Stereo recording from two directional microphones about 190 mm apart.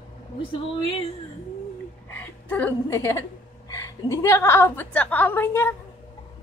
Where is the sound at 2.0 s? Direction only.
10° left (ahead or behind).